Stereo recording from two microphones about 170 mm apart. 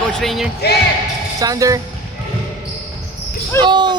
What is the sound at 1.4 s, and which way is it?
Speech, 20° right (ahead or behind).